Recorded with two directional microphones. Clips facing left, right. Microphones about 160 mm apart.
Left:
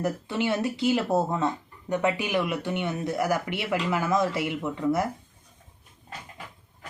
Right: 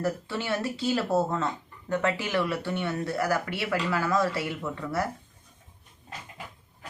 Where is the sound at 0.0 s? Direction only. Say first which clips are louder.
Left 3 dB; 20° left (ahead or behind).